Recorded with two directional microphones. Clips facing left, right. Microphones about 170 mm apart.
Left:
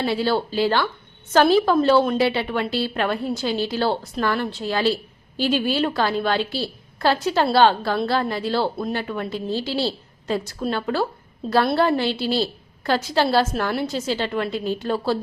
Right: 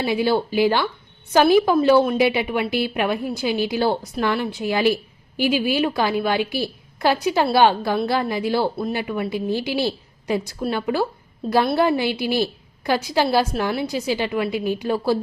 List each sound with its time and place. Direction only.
0.0 s a woman's voice: 15° right (ahead or behind)